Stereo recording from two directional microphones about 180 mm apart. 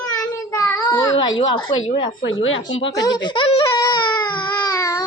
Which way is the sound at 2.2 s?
90° left.